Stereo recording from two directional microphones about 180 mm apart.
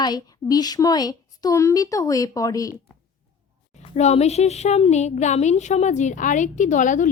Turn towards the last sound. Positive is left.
turn(degrees=45)  # may be behind; listen again after turning